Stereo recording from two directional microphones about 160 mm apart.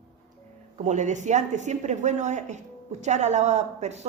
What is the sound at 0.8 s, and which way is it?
Speech, 50° right (ahead or behind).